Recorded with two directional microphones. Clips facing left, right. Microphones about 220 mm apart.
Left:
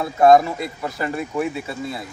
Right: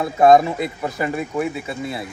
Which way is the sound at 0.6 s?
15° right (ahead or behind).